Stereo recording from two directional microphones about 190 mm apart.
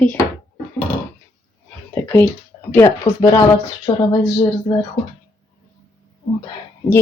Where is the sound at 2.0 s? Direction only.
10° left (ahead or behind).